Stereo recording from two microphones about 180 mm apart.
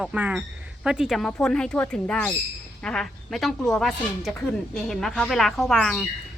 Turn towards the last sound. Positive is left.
turn(degrees=5)  # may be behind; listen again after turning